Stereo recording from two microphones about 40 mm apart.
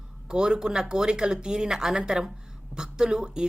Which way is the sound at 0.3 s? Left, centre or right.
Centre.